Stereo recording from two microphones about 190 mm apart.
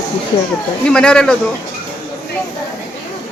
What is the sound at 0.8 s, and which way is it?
Speech, 5° left (ahead or behind).